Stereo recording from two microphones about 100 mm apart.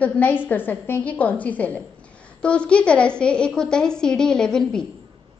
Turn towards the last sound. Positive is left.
turn(degrees=5)  # may be behind; listen again after turning